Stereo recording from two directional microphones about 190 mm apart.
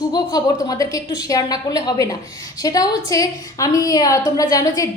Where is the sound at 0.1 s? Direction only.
20° left (ahead or behind).